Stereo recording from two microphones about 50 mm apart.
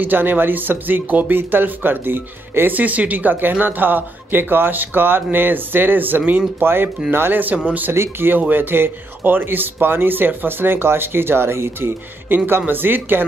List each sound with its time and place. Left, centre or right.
0.0 s a man's voice: right
7.5 s speech: right
7.9 s a man's voice: right
8.4 s a man's voice: right